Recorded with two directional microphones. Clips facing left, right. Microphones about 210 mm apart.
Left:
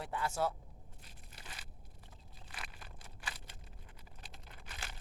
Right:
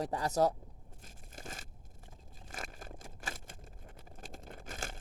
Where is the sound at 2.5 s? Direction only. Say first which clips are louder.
Right 7 dB; 45° right (ahead or behind).